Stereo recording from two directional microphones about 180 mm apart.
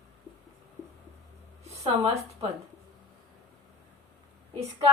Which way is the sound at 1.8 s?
35° right (ahead or behind).